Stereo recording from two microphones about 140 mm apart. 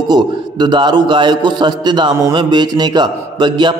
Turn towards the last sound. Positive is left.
turn(degrees=-35)  # may be behind; listen again after turning